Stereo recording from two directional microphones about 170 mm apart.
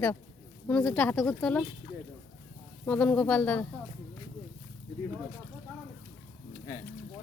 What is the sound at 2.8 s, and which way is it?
Speech, 10° left (ahead or behind).